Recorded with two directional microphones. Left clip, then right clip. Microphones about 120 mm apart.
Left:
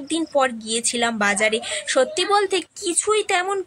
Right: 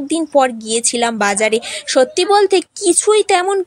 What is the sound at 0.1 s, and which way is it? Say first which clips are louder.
Speech: right 6 dB; 35° right (ahead or behind).